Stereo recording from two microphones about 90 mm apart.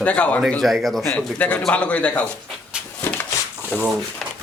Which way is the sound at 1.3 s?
20° left (ahead or behind).